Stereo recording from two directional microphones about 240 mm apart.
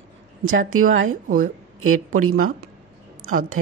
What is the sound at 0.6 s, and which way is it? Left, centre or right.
Speech, right.